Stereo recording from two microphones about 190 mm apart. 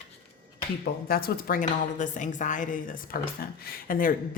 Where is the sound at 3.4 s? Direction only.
55° left (ahead or behind).